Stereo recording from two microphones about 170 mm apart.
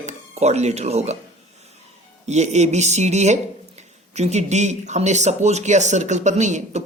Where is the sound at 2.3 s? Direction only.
40° right (ahead or behind).